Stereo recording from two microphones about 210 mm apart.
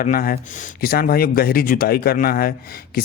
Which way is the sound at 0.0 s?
45° left (ahead or behind).